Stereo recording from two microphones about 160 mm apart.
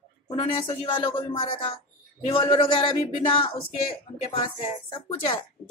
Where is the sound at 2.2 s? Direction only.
35° left (ahead or behind).